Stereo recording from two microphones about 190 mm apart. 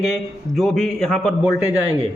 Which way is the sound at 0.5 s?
Centre (ahead or behind).